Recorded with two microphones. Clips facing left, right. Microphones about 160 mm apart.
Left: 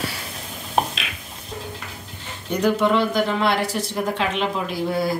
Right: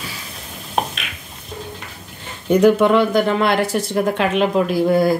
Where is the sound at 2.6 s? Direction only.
55° right (ahead or behind).